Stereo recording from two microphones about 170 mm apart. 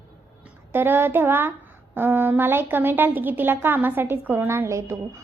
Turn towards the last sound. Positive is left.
turn(degrees=-15)  # may be behind; listen again after turning